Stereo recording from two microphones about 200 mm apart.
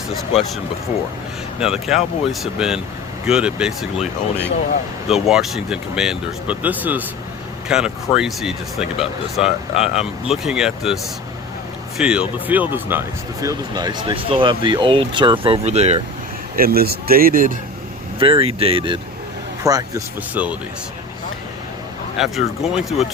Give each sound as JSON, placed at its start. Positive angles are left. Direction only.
{"t": 0.1, "sound": "speech", "side_deg": 0}
{"t": 5.0, "sound": "speech", "side_deg": 0}
{"t": 16.6, "sound": "speech", "side_deg": -50}
{"t": 18.2, "sound": "speech", "side_deg": -25}
{"t": 19.6, "sound": "speech", "side_deg": -15}
{"t": 22.2, "sound": "speech", "side_deg": -5}